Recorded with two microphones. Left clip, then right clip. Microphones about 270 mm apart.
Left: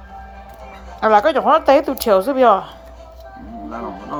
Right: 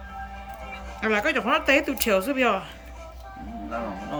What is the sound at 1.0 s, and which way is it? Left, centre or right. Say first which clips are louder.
Speech: left 11 dB; centre.